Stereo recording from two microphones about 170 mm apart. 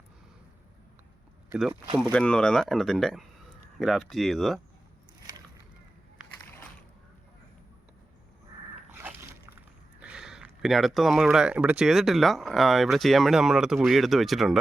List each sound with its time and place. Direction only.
2.1 s speech: 5° left (ahead or behind)
8.9 s slosh: 15° right (ahead or behind)
10.0 s speech: 5° right (ahead or behind)